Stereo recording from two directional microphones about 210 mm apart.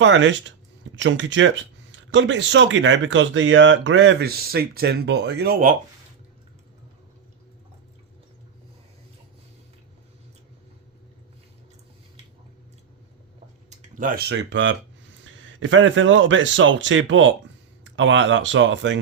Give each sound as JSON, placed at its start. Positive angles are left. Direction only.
{"t": 0.0, "sound": "speech", "side_deg": -60}
{"t": 13.7, "sound": "speech", "side_deg": -40}